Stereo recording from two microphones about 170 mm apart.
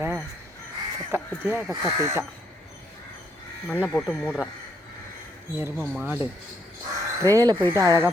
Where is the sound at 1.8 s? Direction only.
15° right (ahead or behind).